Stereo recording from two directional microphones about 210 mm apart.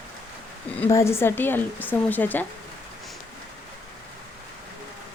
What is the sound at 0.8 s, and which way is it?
Speech, 15° left (ahead or behind).